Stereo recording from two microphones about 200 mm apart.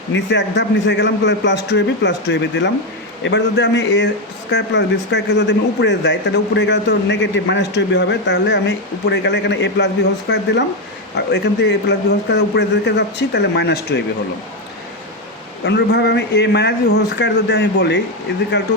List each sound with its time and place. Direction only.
0.1 s speech: 60° left (ahead or behind)
15.6 s speech: 60° left (ahead or behind)